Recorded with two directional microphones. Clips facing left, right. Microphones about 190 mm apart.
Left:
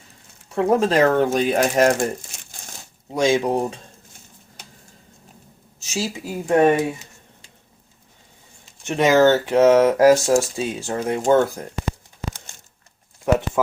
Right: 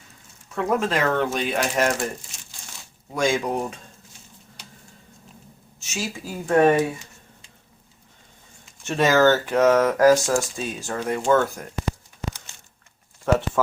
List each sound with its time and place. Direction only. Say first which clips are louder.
0.5 s speech: left 5 dB; 30° left (ahead or behind)
3.1 s speech: left 4 dB; 20° left (ahead or behind)
5.8 s speech: left 5 dB; 30° left (ahead or behind)
6.1 s speech: left 1 dB; 20° left (ahead or behind)
8.8 s speech: left 3 dB; 15° left (ahead or behind)
13.3 s speech: left 2 dB; 15° left (ahead or behind)